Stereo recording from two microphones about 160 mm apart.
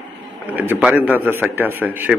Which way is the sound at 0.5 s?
10° right (ahead or behind).